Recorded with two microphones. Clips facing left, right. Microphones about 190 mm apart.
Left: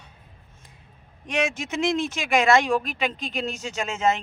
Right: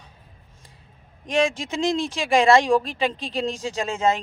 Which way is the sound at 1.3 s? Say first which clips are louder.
Right 4 dB; 30° right (ahead or behind).